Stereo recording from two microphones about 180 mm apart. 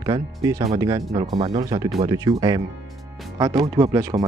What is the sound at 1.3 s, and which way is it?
Speech, 35° right (ahead or behind).